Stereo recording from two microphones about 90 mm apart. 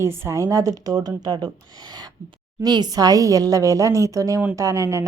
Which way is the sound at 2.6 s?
50° right (ahead or behind).